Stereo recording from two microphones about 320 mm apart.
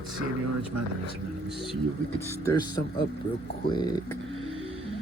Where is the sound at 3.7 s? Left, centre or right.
Centre.